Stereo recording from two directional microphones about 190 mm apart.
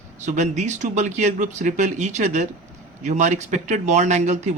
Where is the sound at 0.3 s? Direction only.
40° right (ahead or behind).